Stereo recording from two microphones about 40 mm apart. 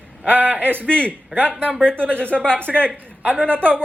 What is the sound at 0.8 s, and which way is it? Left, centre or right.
Speech, left.